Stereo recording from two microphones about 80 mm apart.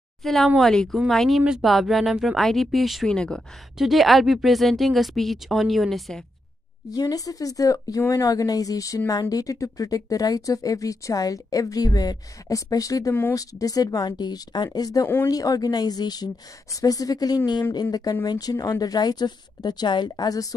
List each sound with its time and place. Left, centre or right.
0.2 s speech: centre
3.1 s speech: centre
3.7 s speech: centre
6.9 s a woman's voice: left